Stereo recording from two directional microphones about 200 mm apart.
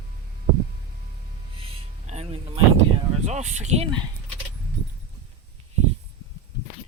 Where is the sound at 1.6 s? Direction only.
30° right (ahead or behind).